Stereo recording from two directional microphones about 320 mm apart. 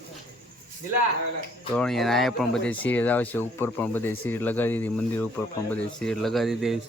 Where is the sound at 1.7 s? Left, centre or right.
Centre.